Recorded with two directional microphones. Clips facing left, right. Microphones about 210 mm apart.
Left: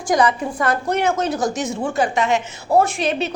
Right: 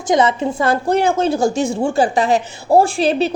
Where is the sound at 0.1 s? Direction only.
25° right (ahead or behind).